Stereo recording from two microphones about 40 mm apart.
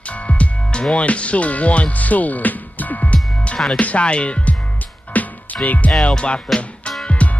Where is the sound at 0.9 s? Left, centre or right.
Left.